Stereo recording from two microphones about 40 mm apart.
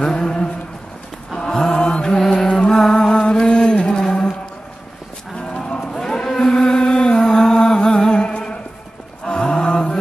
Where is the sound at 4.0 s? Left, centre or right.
Centre.